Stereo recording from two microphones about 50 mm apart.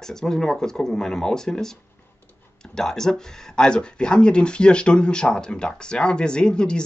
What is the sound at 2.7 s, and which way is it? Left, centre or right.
Speech, centre.